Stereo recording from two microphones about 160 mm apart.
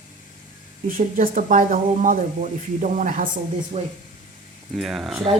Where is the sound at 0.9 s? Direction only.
55° right (ahead or behind).